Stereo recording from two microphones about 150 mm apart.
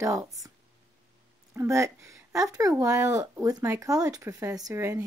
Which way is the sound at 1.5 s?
20° right (ahead or behind).